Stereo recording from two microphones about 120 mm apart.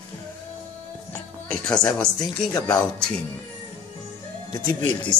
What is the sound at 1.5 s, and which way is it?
Speech, 5° left (ahead or behind).